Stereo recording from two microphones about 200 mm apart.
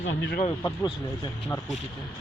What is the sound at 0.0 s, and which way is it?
Speech, 65° left (ahead or behind).